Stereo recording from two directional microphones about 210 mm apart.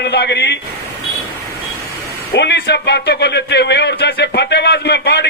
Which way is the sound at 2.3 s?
55° left (ahead or behind).